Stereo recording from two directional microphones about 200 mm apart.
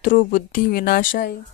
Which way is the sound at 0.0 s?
40° left (ahead or behind).